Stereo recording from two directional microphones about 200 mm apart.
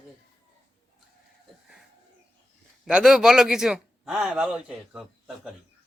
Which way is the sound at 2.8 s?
5° right (ahead or behind).